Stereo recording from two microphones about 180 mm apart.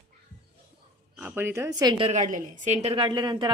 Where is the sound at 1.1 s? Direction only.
10° right (ahead or behind).